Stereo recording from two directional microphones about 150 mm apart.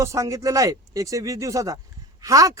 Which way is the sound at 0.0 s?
20° right (ahead or behind).